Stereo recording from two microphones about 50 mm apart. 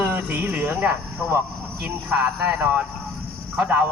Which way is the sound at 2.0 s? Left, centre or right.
Right.